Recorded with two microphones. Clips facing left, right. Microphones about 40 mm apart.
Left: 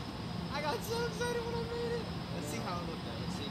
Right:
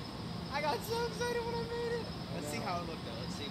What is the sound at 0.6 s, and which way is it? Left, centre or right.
Vehicle, left.